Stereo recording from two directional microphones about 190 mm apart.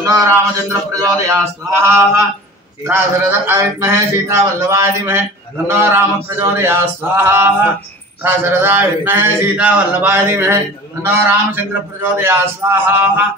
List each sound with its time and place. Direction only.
0.1 s speech: 15° right (ahead or behind)